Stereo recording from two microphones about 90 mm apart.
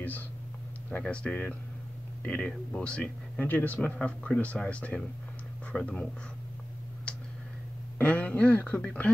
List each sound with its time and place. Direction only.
0.8 s speech: 15° left (ahead or behind)
8.0 s speech: 15° left (ahead or behind)